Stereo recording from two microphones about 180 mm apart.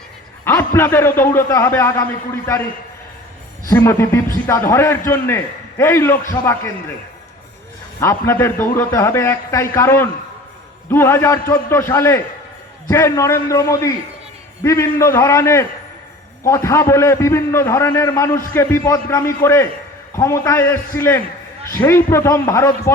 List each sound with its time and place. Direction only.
0.4 s a man's voice: 15° left (ahead or behind)
3.7 s a man's voice: 15° left (ahead or behind)
8.0 s a man's voice: 15° left (ahead or behind)